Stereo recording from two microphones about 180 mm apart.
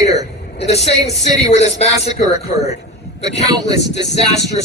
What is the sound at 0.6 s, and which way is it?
Speech, 35° left (ahead or behind).